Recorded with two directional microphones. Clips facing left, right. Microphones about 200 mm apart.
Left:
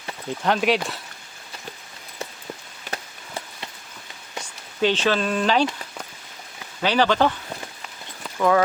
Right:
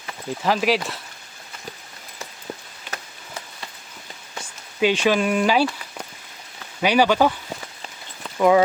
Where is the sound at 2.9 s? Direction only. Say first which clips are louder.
Left 3 dB; 30° left (ahead or behind).